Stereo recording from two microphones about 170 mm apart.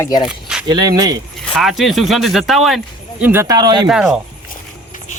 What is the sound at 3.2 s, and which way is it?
Speech, 15° right (ahead or behind).